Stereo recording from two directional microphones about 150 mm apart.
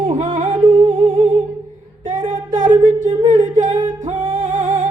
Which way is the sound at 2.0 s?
55° right (ahead or behind).